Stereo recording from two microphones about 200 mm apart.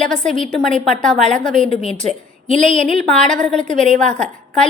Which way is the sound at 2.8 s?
5° left (ahead or behind).